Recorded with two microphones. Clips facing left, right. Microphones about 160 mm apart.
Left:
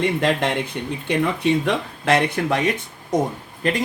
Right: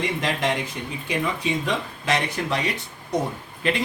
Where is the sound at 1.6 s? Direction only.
60° left (ahead or behind).